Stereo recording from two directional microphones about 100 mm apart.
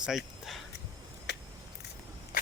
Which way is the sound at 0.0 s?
5° right (ahead or behind).